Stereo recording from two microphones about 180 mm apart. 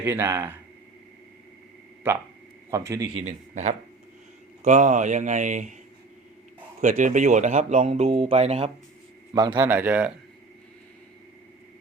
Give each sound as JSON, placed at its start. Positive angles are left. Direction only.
{"t": 0.0, "sound": "speech", "side_deg": -15}
{"t": 2.6, "sound": "a man's voice", "side_deg": -20}
{"t": 3.2, "sound": "speech", "side_deg": -40}
{"t": 6.8, "sound": "speech", "side_deg": -45}
{"t": 9.3, "sound": "a man's voice", "side_deg": -25}
{"t": 9.6, "sound": "speech", "side_deg": -10}